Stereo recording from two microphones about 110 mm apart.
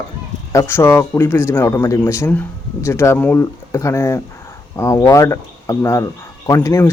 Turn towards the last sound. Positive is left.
turn(degrees=25)  # may be behind; listen again after turning